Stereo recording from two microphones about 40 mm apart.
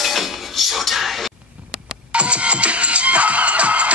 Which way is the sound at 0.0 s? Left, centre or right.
Centre.